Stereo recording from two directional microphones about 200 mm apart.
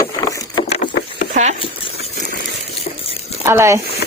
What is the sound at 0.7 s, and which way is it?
Vehicle, 30° left (ahead or behind).